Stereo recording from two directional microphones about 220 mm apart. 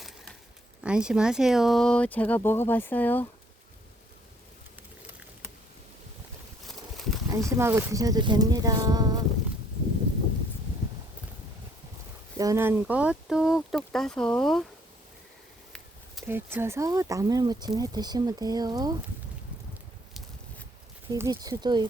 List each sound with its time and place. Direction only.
0.8 s speech: 5° right (ahead or behind)
6.9 s a sound: centre (ahead or behind)
7.3 s speech: 15° right (ahead or behind)
12.4 s speech: 15° right (ahead or behind)
16.2 s speech: 10° right (ahead or behind)
21.1 s speech: 15° right (ahead or behind)